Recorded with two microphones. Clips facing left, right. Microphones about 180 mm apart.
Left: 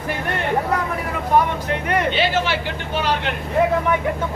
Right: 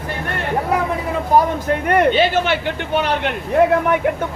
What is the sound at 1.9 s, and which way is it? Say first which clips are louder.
Speech: right 5 dB; 55° right (ahead or behind).